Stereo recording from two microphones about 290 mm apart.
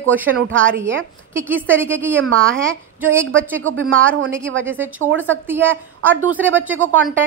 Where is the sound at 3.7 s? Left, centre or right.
Right.